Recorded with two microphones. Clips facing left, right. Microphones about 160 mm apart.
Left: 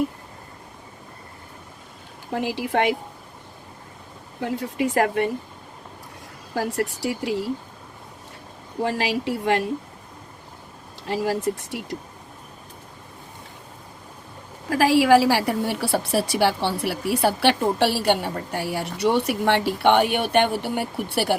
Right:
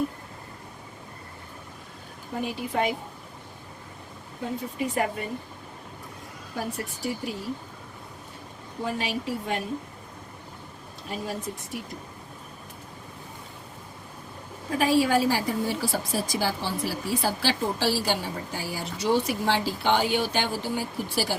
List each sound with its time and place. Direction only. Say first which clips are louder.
2.3 s speech: left 5 dB; 80° left
4.4 s speech: left 5 dB; 80° left
6.5 s speech: left 8 dB; 90° left
8.8 s speech: left 6 dB; 85° left
11.0 s speech: left 9 dB; 85° left
14.7 s a woman's voice: left 6 dB; 80° left; by 21.3 s 65° left (ahead or behind)